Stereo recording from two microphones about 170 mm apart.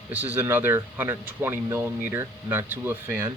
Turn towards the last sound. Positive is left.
turn(degrees=-15)  # may be behind; listen again after turning